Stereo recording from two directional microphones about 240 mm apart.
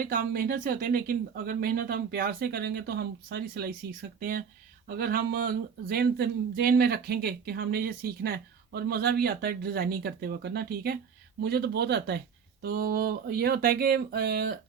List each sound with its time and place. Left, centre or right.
0.0 s speech: right